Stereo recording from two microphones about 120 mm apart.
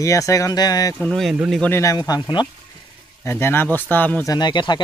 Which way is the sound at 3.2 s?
20° left (ahead or behind).